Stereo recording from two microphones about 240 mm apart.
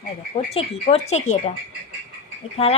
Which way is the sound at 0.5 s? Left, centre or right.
Left.